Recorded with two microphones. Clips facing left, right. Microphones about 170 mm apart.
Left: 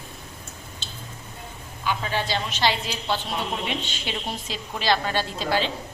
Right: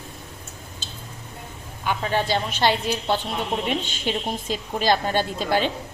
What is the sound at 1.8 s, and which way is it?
A woman's voice, 55° right (ahead or behind).